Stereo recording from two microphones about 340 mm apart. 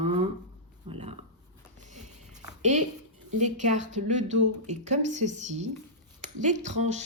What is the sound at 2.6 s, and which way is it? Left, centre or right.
A woman's voice, right.